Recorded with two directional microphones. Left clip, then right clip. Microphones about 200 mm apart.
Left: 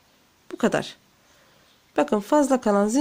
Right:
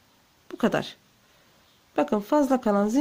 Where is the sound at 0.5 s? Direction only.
5° left (ahead or behind).